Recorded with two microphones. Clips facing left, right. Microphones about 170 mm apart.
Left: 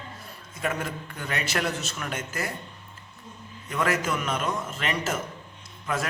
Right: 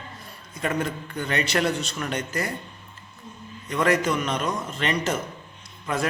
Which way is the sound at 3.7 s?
5° left (ahead or behind).